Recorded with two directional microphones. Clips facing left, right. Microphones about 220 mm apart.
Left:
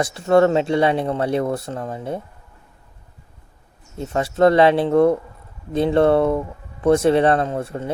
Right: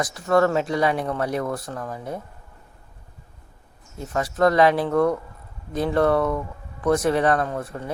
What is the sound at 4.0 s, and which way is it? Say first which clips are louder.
Speech: left 4 dB; 25° left (ahead or behind).